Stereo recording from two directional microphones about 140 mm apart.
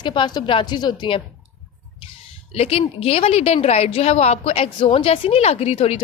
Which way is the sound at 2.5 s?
45° left (ahead or behind).